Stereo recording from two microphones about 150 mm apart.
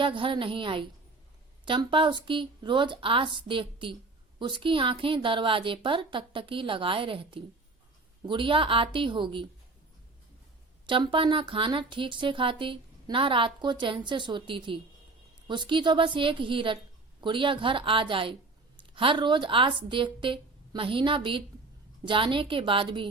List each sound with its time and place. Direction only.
0.0 s speech: 35° right (ahead or behind)
10.8 s speech: 35° right (ahead or behind)